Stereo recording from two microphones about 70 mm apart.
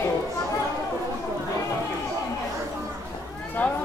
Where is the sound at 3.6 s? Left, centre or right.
Left.